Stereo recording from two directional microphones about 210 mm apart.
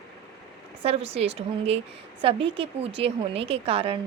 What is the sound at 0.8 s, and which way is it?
A woman's voice, 30° right (ahead or behind).